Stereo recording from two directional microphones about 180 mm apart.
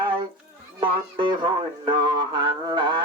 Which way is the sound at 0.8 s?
25° right (ahead or behind).